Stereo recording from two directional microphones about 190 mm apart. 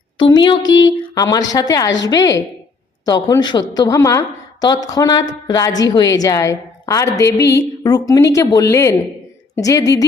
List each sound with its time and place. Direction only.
0.2 s a woman's voice: 25° left (ahead or behind)